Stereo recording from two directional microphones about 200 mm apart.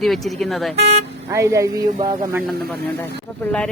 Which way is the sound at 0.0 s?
Centre (ahead or behind).